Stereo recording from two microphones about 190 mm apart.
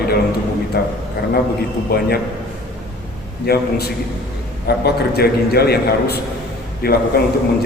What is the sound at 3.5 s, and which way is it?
Speech, 55° left (ahead or behind).